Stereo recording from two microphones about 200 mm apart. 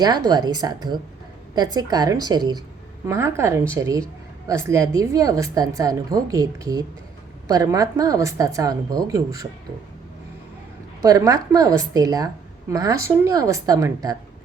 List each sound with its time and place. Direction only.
0.0 s a woman's voice: 20° right (ahead or behind)
11.0 s a woman's voice: 15° right (ahead or behind)